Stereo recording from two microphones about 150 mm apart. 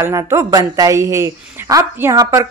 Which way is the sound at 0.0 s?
20° right (ahead or behind).